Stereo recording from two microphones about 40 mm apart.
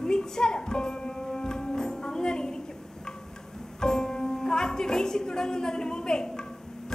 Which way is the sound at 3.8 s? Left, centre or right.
Centre.